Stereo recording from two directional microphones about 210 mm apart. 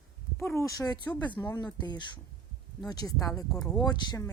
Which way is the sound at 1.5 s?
20° left (ahead or behind).